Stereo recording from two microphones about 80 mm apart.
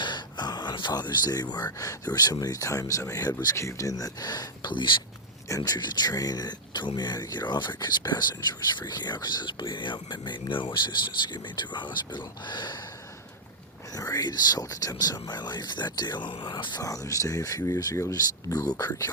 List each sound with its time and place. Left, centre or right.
0.0 s speech: left
4.7 s speech: left
5.5 s speech: left
13.9 s speech: left
16.8 s speech: left